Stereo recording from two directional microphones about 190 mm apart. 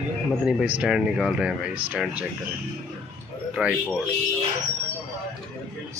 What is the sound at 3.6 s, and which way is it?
Speech, 5° right (ahead or behind).